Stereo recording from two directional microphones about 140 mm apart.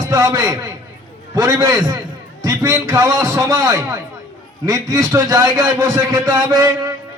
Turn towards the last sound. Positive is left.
turn(degrees=-25)  # may be behind; listen again after turning